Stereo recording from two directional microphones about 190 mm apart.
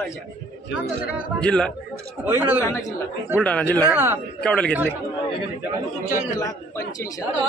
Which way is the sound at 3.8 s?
10° right (ahead or behind).